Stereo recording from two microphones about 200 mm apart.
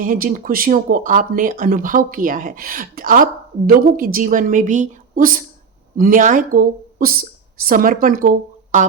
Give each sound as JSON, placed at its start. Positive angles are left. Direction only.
{"t": 0.0, "sound": "speech", "side_deg": -45}